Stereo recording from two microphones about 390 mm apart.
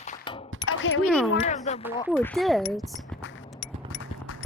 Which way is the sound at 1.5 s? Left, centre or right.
Centre.